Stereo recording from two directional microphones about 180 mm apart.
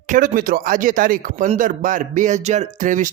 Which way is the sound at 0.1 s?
50° right (ahead or behind).